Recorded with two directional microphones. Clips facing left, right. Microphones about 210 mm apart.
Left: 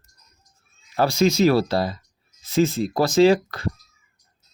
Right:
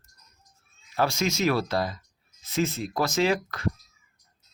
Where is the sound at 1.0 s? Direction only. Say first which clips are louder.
Left 7 dB; 35° left (ahead or behind).